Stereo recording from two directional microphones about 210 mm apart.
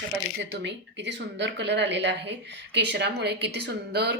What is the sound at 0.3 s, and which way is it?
A woman's voice, 60° right (ahead or behind).